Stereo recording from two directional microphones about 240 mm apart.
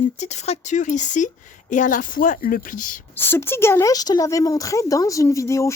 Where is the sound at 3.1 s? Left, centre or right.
Centre.